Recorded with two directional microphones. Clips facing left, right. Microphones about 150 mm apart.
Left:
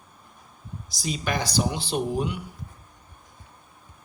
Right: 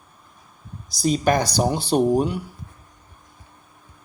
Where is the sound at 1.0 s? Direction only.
40° right (ahead or behind).